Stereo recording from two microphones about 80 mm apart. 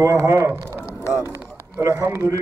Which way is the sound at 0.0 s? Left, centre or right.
Right.